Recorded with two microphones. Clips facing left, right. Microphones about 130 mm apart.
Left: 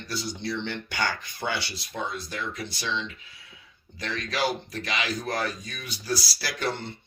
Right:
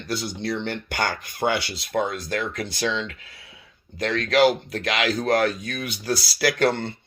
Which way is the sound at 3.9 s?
60° right (ahead or behind).